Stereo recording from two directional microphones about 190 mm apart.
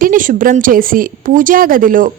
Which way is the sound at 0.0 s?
45° right (ahead or behind).